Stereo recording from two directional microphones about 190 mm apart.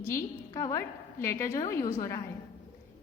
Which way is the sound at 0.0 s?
15° left (ahead or behind).